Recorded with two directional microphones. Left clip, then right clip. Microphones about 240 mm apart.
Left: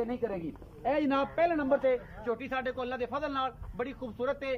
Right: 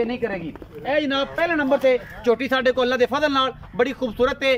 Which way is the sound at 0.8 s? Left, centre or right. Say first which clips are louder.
Right 7 dB; centre.